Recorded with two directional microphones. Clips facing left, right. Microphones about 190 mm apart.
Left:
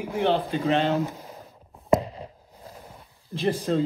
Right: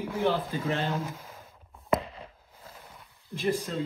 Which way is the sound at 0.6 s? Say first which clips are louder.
Left 9 dB; 85° left.